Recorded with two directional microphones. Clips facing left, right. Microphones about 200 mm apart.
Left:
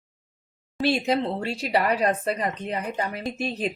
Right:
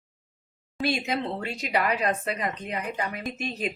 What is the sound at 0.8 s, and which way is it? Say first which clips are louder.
Speech: left 4 dB; 35° left (ahead or behind).